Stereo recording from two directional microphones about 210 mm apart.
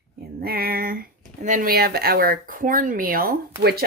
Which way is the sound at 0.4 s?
45° right (ahead or behind).